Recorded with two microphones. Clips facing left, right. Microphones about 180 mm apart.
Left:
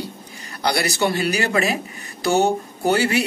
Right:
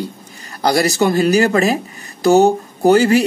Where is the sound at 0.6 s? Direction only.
35° right (ahead or behind).